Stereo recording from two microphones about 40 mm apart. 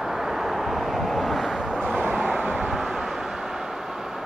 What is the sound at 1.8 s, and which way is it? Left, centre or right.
Vehicle, right.